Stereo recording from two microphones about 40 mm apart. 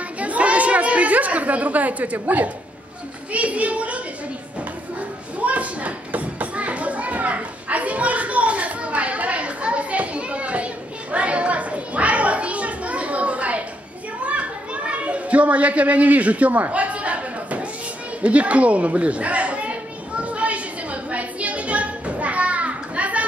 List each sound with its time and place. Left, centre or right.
0.2 s chatter: right
2.1 s a child's voice: right
5.4 s children playing: right
18.2 s a sound: right